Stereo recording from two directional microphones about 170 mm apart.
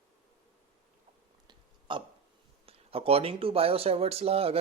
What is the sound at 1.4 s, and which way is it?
Burping, 30° right (ahead or behind).